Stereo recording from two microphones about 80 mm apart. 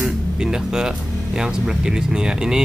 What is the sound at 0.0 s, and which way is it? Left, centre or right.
Speech, centre.